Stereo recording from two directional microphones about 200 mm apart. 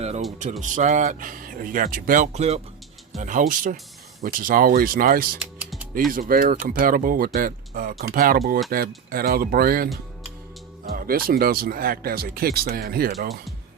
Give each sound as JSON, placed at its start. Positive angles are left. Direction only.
{"t": 0.6, "sound": "speech", "side_deg": -40}
{"t": 5.4, "sound": "typing", "side_deg": -5}
{"t": 6.1, "sound": "speech", "side_deg": -45}
{"t": 10.9, "sound": "speech", "side_deg": -45}